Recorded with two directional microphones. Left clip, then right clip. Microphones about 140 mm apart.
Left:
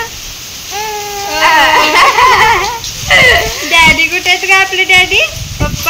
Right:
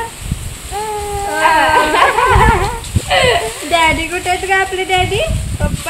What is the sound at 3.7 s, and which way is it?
A woman's voice, 15° right (ahead or behind).